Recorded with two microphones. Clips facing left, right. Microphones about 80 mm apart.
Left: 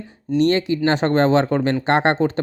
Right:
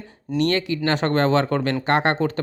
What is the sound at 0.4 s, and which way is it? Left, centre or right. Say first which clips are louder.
Speech: left 4 dB; left.